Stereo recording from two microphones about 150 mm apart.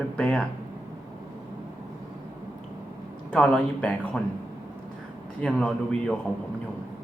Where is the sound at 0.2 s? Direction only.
5° left (ahead or behind).